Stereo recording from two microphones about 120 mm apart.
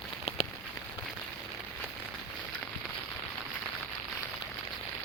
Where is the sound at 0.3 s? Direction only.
60° left (ahead or behind).